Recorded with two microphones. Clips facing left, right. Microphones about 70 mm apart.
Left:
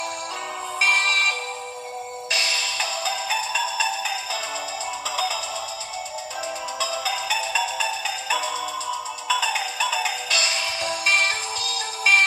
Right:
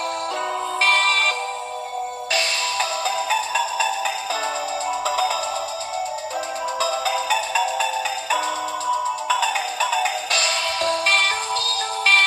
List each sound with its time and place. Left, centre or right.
0.7 s music: centre
2.8 s music: right
6.8 s music: right
10.4 s music: centre